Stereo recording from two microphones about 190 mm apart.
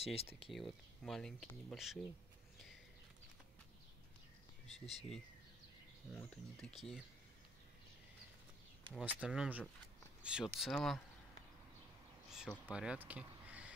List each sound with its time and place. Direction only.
0.0 s speech: 30° left (ahead or behind)
0.5 s speech: centre (ahead or behind)
4.6 s speech: centre (ahead or behind)
8.9 s speech: 5° right (ahead or behind)
12.3 s speech: 5° right (ahead or behind)